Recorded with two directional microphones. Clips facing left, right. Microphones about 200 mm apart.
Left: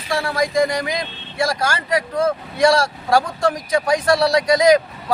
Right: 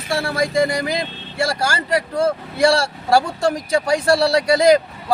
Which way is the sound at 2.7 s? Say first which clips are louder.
Even; 25° right (ahead or behind).